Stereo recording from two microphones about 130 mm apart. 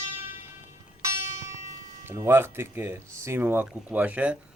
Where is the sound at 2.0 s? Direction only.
20° right (ahead or behind).